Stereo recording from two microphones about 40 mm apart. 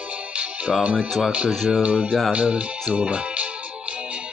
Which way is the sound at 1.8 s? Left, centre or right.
Right.